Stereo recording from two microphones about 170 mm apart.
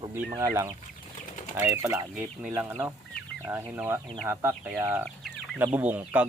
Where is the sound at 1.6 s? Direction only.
10° right (ahead or behind).